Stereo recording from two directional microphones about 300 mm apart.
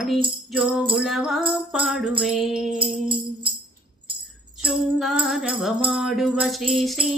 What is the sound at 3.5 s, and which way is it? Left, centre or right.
Music, centre.